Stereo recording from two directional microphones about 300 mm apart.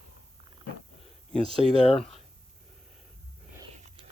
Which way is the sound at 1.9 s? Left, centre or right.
Centre.